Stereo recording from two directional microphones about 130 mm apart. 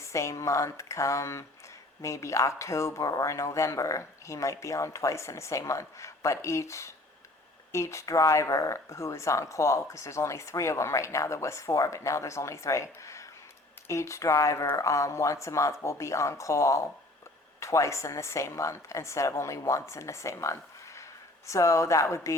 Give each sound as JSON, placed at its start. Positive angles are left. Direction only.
{"t": 0.0, "sound": "speech", "side_deg": 25}